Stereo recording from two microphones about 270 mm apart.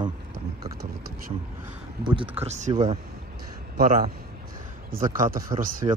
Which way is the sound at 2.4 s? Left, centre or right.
Right.